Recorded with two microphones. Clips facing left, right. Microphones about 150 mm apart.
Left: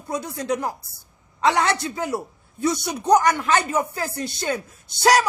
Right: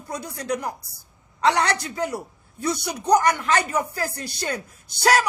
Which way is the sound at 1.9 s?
25° left (ahead or behind).